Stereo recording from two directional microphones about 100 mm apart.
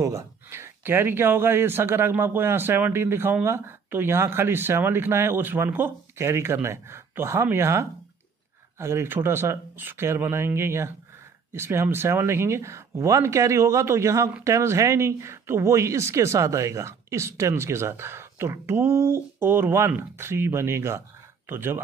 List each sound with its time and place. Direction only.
0.0 s speech: 30° right (ahead or behind)